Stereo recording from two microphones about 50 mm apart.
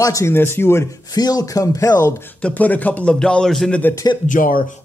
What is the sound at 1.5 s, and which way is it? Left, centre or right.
Speech, left.